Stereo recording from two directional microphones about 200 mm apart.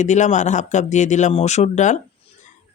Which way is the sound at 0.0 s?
35° left (ahead or behind).